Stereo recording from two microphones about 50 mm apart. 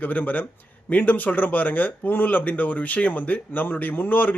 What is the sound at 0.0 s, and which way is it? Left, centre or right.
Speech, left.